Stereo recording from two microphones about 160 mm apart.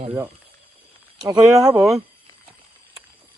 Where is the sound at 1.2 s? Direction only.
25° right (ahead or behind).